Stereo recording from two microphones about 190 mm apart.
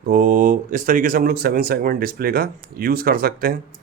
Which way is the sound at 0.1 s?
45° right (ahead or behind).